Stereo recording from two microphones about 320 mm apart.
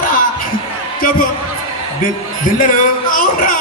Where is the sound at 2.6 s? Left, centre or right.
Left.